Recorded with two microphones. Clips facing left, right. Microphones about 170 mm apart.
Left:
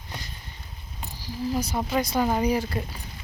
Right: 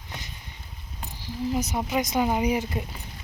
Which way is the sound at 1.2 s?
20° right (ahead or behind).